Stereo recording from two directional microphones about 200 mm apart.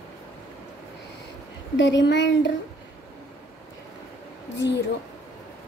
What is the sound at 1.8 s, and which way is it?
Speech, 65° left (ahead or behind).